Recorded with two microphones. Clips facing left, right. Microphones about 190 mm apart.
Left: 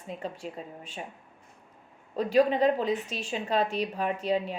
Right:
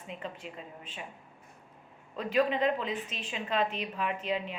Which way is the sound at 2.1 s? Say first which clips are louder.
Left 5 dB; 35° left (ahead or behind).